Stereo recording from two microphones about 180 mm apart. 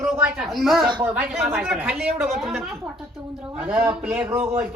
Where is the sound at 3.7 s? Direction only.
5° right (ahead or behind).